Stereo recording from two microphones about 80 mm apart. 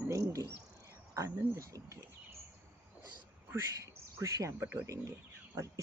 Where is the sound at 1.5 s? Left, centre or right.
Right.